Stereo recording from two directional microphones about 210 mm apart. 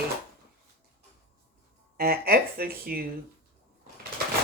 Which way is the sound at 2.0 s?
45° right (ahead or behind).